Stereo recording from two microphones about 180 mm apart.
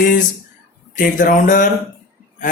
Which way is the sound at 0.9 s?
45° left (ahead or behind).